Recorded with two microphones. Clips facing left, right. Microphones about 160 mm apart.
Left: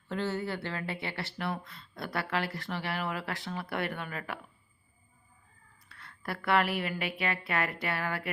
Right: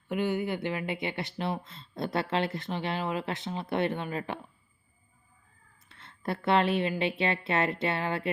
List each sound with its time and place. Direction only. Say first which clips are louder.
0.1 s speech: right 4 dB; 15° right (ahead or behind)
5.9 s speech: right 5 dB; 25° right (ahead or behind)